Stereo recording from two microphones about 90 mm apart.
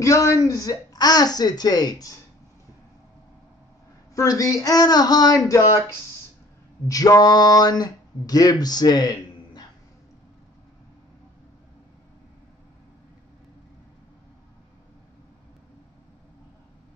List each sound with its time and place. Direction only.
0.0 s a woman's voice: 35° left (ahead or behind)
4.1 s a woman's voice: 40° left (ahead or behind)
6.9 s speech: 45° left (ahead or behind)